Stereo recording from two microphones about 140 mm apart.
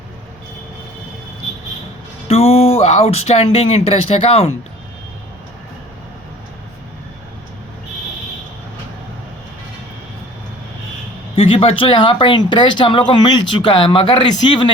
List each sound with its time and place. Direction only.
2.2 s speech: 45° left (ahead or behind)
11.3 s speech: 40° left (ahead or behind)